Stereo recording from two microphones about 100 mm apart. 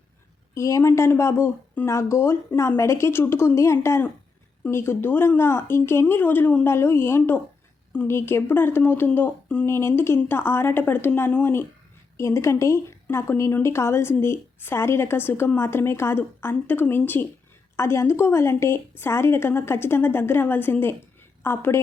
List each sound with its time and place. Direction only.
0.5 s a woman's voice: 30° left (ahead or behind)